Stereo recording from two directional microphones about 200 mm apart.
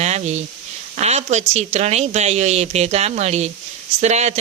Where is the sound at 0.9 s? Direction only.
35° right (ahead or behind).